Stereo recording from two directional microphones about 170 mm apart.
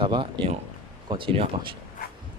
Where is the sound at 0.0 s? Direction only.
30° right (ahead or behind).